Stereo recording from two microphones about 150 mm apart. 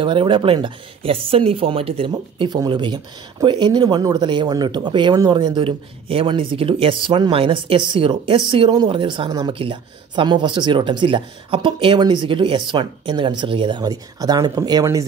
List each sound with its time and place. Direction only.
0.0 s speech: 35° right (ahead or behind)